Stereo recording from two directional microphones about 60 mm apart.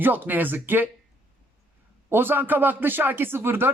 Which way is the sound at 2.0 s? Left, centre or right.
Right.